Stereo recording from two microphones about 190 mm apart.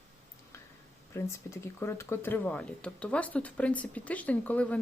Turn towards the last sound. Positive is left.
turn(degrees=5)  # may be behind; listen again after turning